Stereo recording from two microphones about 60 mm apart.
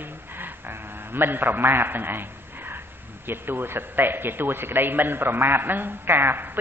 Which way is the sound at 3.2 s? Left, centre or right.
Right.